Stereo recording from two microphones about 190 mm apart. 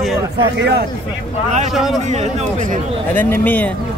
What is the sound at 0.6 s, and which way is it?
Speech, 60° right (ahead or behind).